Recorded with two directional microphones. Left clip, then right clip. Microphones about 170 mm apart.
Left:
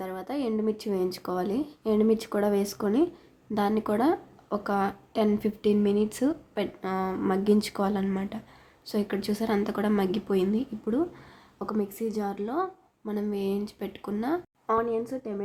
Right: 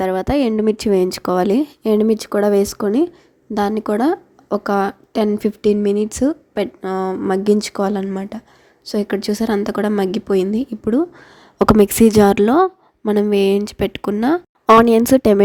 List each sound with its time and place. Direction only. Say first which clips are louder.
0.0 s speech: right 15 dB; 55° right (ahead or behind)
11.5 s a woman's voice: right 19 dB; 65° right (ahead or behind)